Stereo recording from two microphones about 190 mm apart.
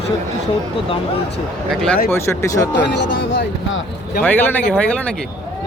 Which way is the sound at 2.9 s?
70° left (ahead or behind).